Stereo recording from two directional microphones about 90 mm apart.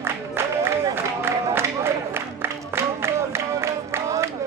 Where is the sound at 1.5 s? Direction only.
25° right (ahead or behind).